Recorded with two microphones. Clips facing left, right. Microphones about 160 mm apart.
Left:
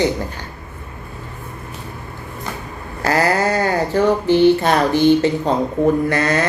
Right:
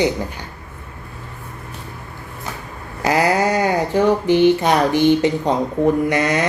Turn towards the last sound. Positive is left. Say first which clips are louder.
# even
turn(degrees=-15)  # may be behind; listen again after turning